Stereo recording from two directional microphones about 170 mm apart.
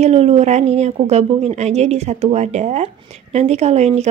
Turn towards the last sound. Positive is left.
turn(degrees=-40)  # may be behind; listen again after turning